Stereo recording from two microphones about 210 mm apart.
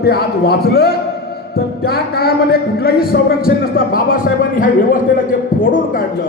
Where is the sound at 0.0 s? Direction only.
50° left (ahead or behind).